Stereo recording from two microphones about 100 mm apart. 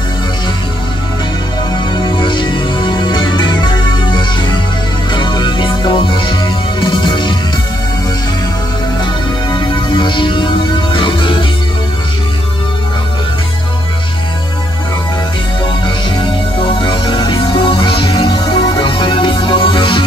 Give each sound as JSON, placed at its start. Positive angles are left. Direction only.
{"t": 2.0, "sound": "music", "side_deg": 55}
{"t": 9.0, "sound": "music", "side_deg": 50}
{"t": 16.2, "sound": "music", "side_deg": 55}